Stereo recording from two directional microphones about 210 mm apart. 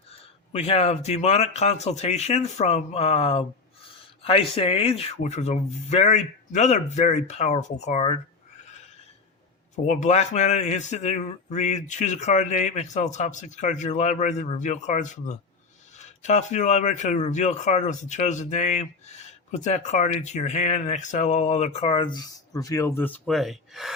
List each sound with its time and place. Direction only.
0.5 s speech: 30° left (ahead or behind)
9.7 s speech: 35° left (ahead or behind); by 23.9 s centre (ahead or behind)